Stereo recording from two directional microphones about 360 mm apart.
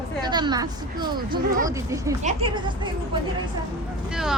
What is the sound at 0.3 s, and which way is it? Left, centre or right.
A woman's voice, centre.